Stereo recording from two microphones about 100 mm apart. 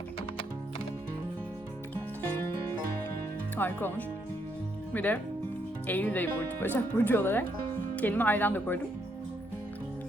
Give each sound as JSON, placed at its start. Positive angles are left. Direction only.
{"t": 3.6, "sound": "speech", "side_deg": 20}